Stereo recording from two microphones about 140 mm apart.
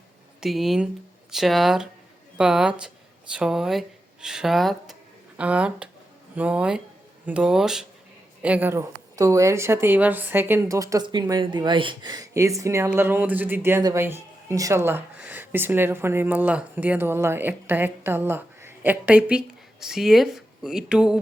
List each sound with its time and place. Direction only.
0.4 s a woman's voice: centre (ahead or behind)